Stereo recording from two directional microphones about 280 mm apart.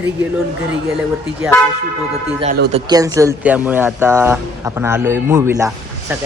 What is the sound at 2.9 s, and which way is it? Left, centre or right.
Speech, centre.